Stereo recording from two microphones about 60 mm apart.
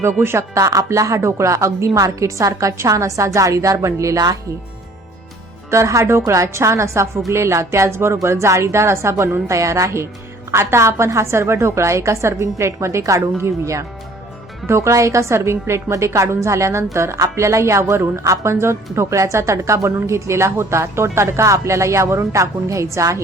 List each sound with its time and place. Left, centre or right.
0.0 s a woman's voice: right
0.5 s a woman's voice: right
2.0 s a woman's voice: right
5.7 s a woman's voice: right